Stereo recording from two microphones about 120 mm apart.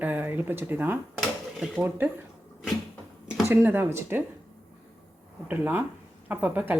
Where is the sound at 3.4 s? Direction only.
15° right (ahead or behind).